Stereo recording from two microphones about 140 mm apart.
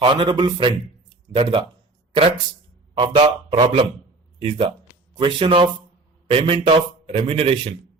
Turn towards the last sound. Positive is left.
turn(degrees=-40)  # may be behind; listen again after turning